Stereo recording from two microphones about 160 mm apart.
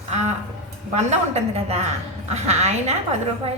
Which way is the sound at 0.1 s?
45° right (ahead or behind).